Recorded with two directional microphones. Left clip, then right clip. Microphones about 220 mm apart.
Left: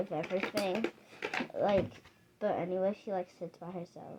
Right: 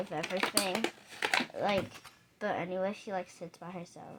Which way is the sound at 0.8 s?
5° right (ahead or behind).